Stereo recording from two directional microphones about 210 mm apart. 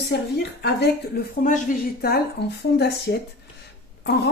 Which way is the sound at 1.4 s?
40° left (ahead or behind).